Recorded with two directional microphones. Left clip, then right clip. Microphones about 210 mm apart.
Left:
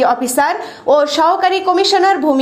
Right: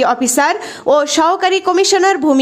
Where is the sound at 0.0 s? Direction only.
50° right (ahead or behind).